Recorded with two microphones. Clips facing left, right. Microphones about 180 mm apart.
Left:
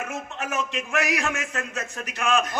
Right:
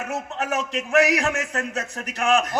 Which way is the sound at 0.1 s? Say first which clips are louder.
Right 4 dB; 35° right (ahead or behind).